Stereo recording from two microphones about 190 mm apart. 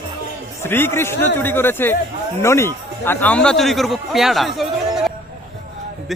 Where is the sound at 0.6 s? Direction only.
10° left (ahead or behind).